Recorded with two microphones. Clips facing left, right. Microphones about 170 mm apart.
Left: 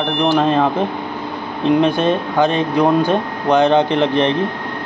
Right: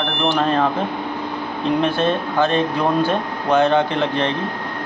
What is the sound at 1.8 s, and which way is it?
Speech, 15° left (ahead or behind).